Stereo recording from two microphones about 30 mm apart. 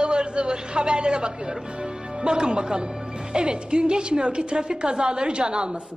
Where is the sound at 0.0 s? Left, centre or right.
Right.